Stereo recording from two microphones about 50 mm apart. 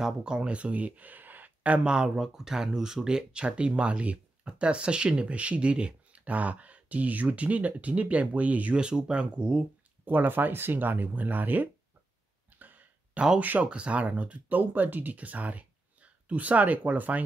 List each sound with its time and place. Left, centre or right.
0.0 s speech: centre; by 1.8 s right
2.1 s speech: centre; by 8.7 s right
8.7 s speech: centre
10.0 s speech: right
12.5 s a sound: right
13.4 s speech: right
13.7 s speech: right